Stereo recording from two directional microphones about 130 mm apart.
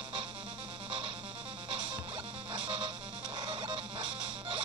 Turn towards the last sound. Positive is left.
turn(degrees=-40)  # may be behind; listen again after turning